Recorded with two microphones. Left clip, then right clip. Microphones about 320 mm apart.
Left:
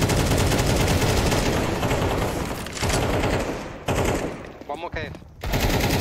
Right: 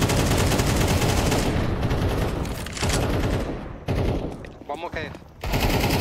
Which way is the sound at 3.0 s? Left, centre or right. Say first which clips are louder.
Left 3 dB; centre.